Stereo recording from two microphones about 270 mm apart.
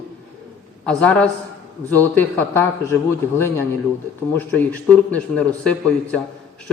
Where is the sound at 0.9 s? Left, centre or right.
Centre.